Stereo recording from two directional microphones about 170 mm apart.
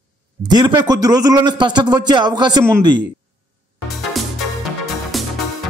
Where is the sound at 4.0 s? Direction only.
Centre (ahead or behind).